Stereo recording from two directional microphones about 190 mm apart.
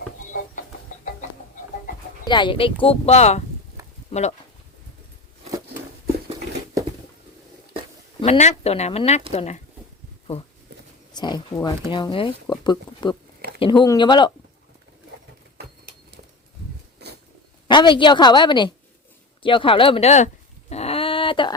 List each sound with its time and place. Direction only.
2.2 s speech: 25° left (ahead or behind)
8.2 s speech: 35° left (ahead or behind)
11.1 s speech: 20° left (ahead or behind)
15.5 s bird: 55° right (ahead or behind)
17.7 s speech: 25° left (ahead or behind)
19.4 s dog: 25° left (ahead or behind)